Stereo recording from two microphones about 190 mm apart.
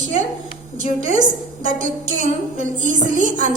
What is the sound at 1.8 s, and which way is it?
A woman's voice, 40° right (ahead or behind).